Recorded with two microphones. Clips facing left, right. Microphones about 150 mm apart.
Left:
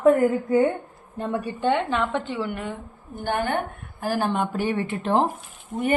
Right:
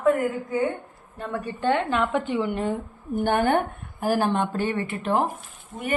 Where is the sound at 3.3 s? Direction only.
50° right (ahead or behind).